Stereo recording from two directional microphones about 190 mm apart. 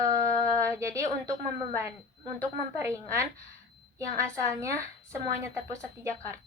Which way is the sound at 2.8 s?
15° right (ahead or behind).